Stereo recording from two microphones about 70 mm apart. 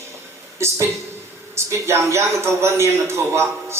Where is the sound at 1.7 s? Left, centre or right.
Right.